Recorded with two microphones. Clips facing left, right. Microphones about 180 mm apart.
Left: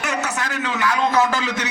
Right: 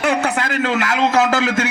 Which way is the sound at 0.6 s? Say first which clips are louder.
Right 2 dB; 90° right.